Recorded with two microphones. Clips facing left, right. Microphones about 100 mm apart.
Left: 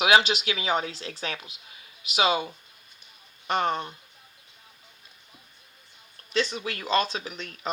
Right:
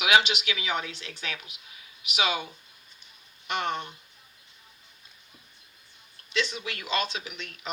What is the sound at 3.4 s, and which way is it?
Speech, 40° left (ahead or behind).